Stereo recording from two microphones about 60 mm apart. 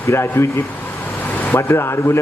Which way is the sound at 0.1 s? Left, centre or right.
Left.